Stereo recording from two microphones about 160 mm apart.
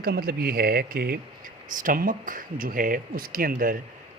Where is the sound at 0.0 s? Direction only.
70° right (ahead or behind).